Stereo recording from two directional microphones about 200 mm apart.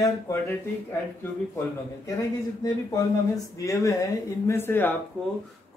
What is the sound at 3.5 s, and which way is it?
Speech, 15° left (ahead or behind).